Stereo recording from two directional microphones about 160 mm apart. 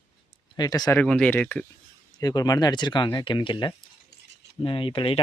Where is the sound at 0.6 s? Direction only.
25° left (ahead or behind).